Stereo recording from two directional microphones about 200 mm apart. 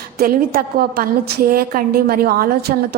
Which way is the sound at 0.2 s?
50° right (ahead or behind).